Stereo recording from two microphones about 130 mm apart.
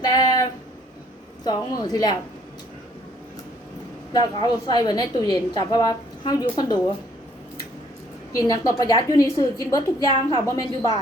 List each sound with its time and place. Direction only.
0.0 s a sound: 30° left (ahead or behind)
1.5 s a woman's voice: 30° left (ahead or behind)
4.1 s a woman's voice: 30° left (ahead or behind)
8.4 s a woman's voice: 25° left (ahead or behind)